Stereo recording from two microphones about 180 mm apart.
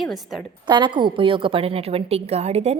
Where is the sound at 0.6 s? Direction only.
25° right (ahead or behind).